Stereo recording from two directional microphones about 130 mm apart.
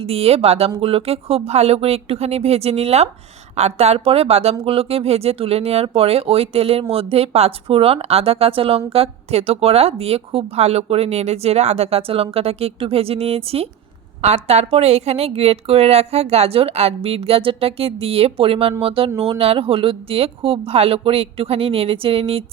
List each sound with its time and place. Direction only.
0.0 s speech: 50° right (ahead or behind)